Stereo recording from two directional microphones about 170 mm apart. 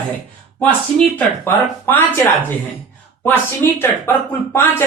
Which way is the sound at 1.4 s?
10° left (ahead or behind).